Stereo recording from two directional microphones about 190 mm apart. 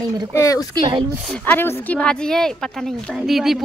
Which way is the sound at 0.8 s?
25° right (ahead or behind).